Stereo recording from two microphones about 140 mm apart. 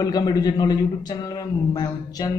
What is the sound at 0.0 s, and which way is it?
A woman's voice, 25° left (ahead or behind).